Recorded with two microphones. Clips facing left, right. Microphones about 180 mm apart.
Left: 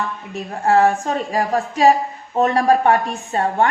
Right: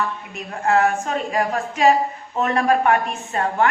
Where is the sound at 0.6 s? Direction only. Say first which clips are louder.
Left 3 dB; 35° left (ahead or behind).